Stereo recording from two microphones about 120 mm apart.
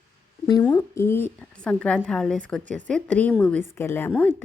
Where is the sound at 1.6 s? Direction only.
10° left (ahead or behind).